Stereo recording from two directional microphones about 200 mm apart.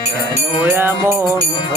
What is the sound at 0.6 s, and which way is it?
Music, 10° right (ahead or behind).